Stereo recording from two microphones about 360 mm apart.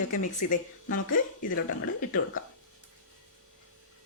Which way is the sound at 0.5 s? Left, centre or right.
Left.